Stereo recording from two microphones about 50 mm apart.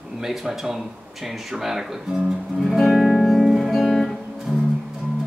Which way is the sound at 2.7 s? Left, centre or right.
Centre.